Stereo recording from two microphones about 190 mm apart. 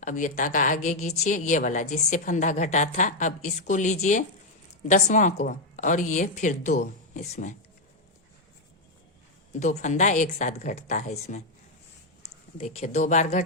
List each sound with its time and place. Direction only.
0.0 s a woman's voice: 40° left (ahead or behind)
9.6 s a woman's voice: 40° left (ahead or behind)
12.5 s a woman's voice: 35° left (ahead or behind)